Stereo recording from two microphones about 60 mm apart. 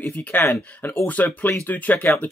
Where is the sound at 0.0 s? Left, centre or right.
Left.